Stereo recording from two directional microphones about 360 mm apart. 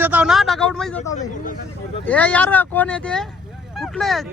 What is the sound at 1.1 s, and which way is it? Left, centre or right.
Speech, centre.